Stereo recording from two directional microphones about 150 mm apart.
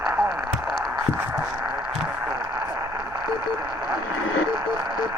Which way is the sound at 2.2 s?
15° right (ahead or behind).